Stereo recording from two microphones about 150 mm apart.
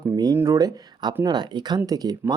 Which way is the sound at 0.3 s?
20° right (ahead or behind).